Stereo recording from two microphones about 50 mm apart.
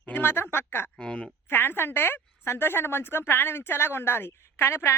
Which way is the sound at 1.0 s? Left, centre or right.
Centre.